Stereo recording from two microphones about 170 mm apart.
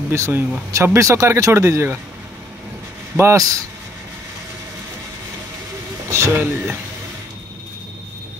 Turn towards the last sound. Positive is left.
turn(degrees=-10)  # may be behind; listen again after turning